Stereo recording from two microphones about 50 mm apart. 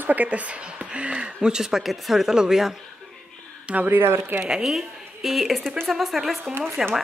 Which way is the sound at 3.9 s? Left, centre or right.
Right.